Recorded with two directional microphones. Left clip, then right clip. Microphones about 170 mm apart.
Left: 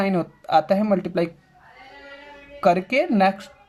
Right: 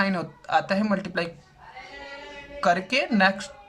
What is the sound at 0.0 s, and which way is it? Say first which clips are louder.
Speech: left 3 dB; 20° left (ahead or behind).